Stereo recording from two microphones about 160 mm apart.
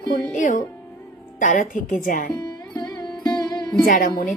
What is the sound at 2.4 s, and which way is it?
Music, 25° left (ahead or behind).